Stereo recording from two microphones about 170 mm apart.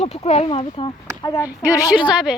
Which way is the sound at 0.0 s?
40° left (ahead or behind).